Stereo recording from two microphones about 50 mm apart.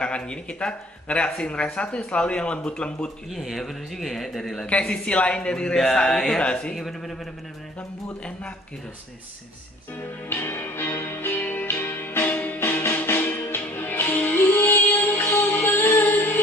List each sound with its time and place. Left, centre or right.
0.0 s speech: centre
3.3 s a man's voice: centre
4.6 s speech: left
5.9 s a sound: centre
6.7 s a man's voice: centre
10.3 s music: left
11.1 s music: left
12.3 s music: left
12.5 s music: left